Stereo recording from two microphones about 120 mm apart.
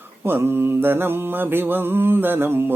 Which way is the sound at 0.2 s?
20° right (ahead or behind).